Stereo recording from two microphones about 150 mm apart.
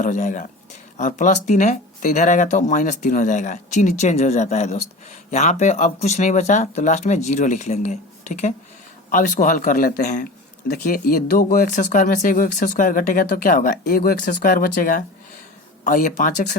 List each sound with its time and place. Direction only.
0.0 s speech: 60° left (ahead or behind)
10.8 s speech: 70° left (ahead or behind)